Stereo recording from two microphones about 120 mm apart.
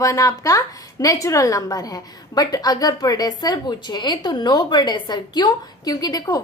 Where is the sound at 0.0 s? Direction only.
30° left (ahead or behind).